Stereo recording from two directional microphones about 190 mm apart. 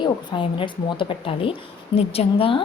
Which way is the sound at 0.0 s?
25° left (ahead or behind).